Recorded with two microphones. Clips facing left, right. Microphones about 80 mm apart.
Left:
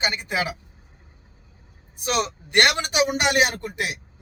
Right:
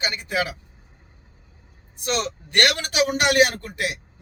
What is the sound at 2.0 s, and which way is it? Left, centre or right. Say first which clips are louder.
A man's voice: left 1 dB; centre.